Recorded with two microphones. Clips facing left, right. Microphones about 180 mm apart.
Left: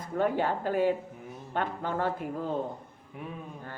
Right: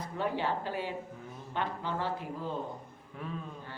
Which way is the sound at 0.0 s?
50° left (ahead or behind).